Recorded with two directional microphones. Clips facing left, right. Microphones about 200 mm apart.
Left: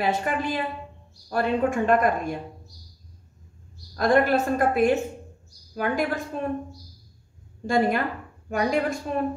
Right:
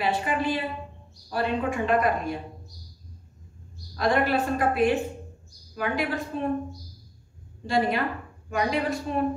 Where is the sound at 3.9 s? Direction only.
45° left (ahead or behind).